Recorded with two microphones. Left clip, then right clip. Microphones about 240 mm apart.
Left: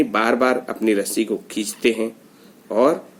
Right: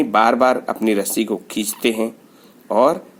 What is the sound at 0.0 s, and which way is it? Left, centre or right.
Speech, right.